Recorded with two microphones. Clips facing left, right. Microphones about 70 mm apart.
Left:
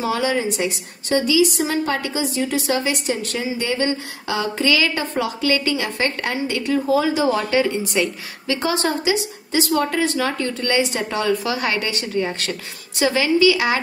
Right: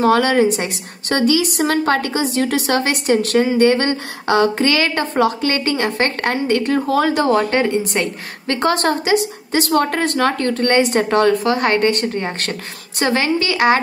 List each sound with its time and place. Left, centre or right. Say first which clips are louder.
0.0 s a woman's voice: right 7 dB; right